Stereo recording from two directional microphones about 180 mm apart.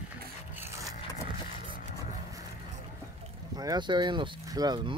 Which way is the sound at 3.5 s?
20° right (ahead or behind).